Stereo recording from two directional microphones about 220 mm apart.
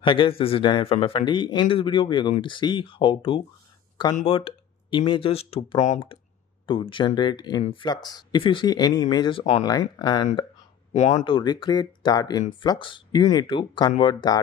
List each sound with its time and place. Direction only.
0.0 s speech: 25° left (ahead or behind)